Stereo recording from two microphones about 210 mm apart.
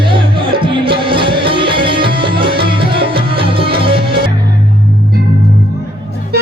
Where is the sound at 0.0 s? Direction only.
25° right (ahead or behind).